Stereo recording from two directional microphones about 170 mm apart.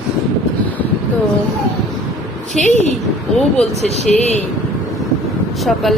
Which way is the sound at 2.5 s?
Centre (ahead or behind).